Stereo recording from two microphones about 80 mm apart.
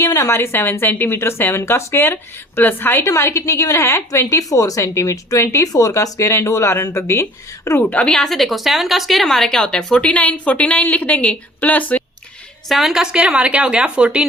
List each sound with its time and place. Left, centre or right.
0.0 s a sound: left
0.3 s a woman's voice: left
7.9 s speech: centre
12.6 s a woman's voice: centre